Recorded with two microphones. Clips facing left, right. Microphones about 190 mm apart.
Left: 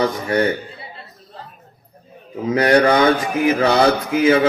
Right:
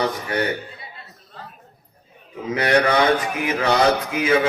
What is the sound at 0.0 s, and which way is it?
Speech, 35° left (ahead or behind).